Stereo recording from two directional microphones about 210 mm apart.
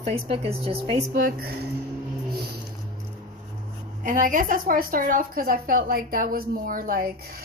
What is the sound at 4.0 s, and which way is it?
A woman's voice, 40° right (ahead or behind).